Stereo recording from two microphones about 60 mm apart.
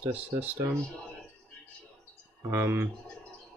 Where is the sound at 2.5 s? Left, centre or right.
Right.